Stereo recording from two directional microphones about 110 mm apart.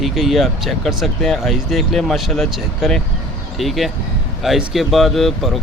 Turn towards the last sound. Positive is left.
turn(degrees=0)  # may be behind; listen again after turning